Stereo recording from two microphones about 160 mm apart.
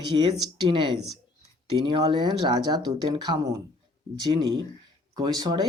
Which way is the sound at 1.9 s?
25° right (ahead or behind).